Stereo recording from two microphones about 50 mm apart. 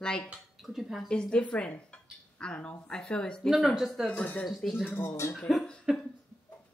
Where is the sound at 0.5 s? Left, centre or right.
Centre.